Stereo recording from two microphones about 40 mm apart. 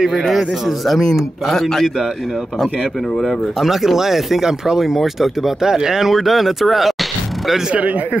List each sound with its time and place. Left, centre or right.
0.3 s a man's voice: centre
3.2 s speech: centre
7.7 s speech: right